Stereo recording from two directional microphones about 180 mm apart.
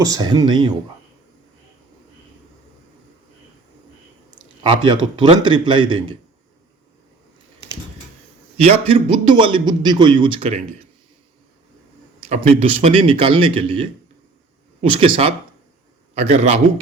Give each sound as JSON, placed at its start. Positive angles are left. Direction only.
{"t": 0.0, "sound": "a man's voice", "side_deg": -20}
{"t": 4.6, "sound": "a man's voice", "side_deg": -25}
{"t": 8.6, "sound": "a man's voice", "side_deg": -30}
{"t": 12.4, "sound": "a man's voice", "side_deg": -35}